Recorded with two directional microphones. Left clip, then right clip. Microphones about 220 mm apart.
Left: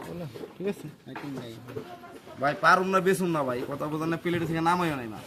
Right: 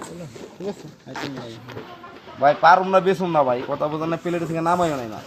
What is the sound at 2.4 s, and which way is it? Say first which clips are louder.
A man's voice: right 8 dB; 35° left (ahead or behind).